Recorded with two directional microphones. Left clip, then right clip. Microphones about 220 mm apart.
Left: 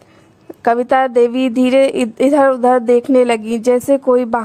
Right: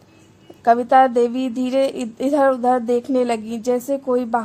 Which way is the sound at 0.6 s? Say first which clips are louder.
Left 1 dB; 30° left (ahead or behind).